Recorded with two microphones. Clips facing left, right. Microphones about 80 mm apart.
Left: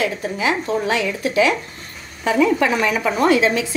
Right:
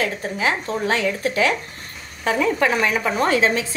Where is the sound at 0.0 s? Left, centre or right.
Right.